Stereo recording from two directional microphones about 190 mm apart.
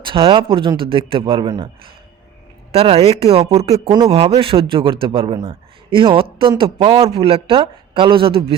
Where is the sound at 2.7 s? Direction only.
30° right (ahead or behind).